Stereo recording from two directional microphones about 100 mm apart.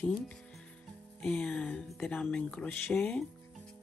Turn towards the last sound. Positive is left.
turn(degrees=10)  # may be behind; listen again after turning